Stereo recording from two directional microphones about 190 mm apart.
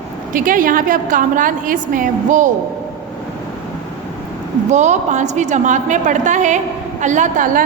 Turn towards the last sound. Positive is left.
turn(degrees=-40)  # may be behind; listen again after turning